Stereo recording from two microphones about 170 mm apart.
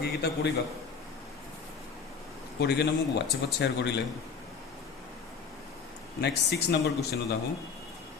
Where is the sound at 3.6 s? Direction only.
90° left.